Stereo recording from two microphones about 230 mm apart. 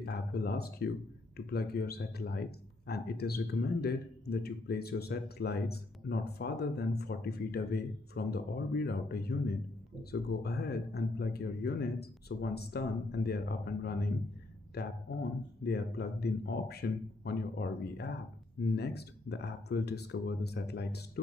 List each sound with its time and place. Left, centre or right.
0.0 s speech: left
10.4 s speech: left